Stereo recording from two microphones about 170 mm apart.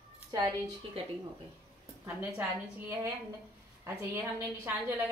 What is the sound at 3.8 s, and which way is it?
A woman's voice, 15° right (ahead or behind).